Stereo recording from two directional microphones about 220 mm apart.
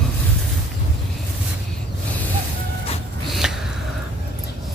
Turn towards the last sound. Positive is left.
turn(degrees=-5)  # may be behind; listen again after turning